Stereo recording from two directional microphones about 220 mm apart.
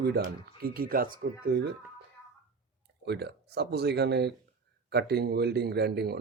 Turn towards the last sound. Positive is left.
turn(degrees=-50)  # may be behind; listen again after turning